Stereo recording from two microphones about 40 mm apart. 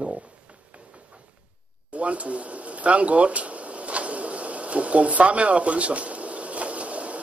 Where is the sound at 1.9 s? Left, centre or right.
Right.